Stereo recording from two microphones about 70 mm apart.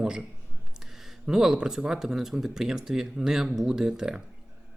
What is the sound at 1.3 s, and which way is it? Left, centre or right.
Speech, centre.